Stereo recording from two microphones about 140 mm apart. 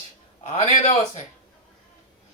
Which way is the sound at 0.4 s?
55° left (ahead or behind).